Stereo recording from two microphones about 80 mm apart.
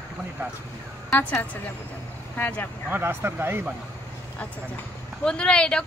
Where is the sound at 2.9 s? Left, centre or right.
Right.